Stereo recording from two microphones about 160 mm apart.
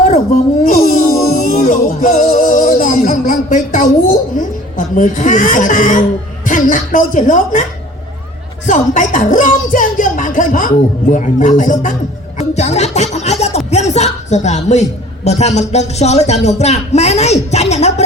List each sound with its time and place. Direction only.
0.6 s music: 50° left (ahead or behind)
4.9 s a man's voice: 55° left (ahead or behind)
8.6 s a woman's voice: 50° left (ahead or behind)
12.4 s music: 45° left (ahead or behind)
13.7 s a woman's voice: 45° left (ahead or behind)